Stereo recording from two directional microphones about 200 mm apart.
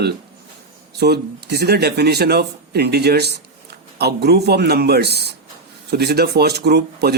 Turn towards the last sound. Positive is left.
turn(degrees=-55)  # may be behind; listen again after turning